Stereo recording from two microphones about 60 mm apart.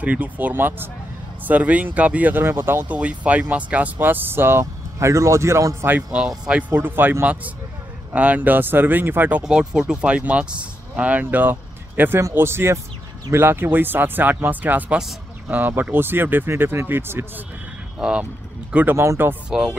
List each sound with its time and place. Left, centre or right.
0.0 s speech: right
1.4 s speech: right
2.4 s speech: right
2.9 s speech: right
4.9 s a man's voice: right
5.8 s speech: right
6.1 s speech: centre
6.7 s speech: right
8.1 s speech: right
9.4 s speech: centre; by 12.2 s right
12.4 s speech: right
17.9 s speech: centre
18.9 s speech: right
19.5 s speech: centre